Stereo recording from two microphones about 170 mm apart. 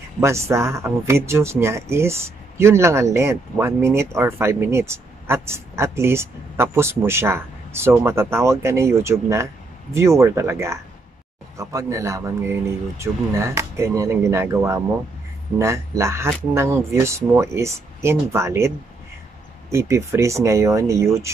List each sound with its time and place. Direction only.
0.2 s speech: 15° right (ahead or behind)
16.0 s speech: 15° right (ahead or behind)
19.7 s speech: 15° right (ahead or behind)